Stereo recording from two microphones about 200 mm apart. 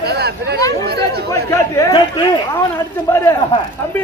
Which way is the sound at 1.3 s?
15° left (ahead or behind).